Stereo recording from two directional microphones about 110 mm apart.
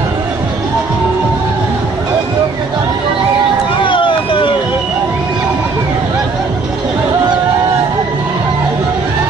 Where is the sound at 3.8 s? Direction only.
50° left (ahead or behind).